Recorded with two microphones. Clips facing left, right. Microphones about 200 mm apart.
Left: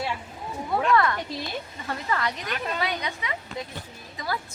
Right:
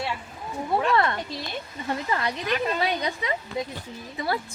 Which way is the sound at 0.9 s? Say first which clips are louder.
Left 1 dB; 25° right (ahead or behind).